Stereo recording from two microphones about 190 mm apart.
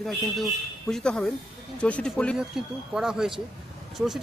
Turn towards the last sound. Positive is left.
turn(degrees=0)  # may be behind; listen again after turning